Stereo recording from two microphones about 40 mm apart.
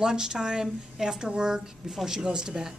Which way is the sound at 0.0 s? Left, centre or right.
Centre.